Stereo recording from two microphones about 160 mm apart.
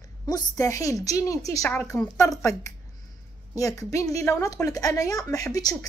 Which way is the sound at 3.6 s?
20° left (ahead or behind).